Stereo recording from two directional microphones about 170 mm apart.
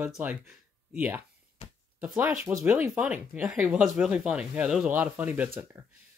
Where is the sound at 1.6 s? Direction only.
35° left (ahead or behind).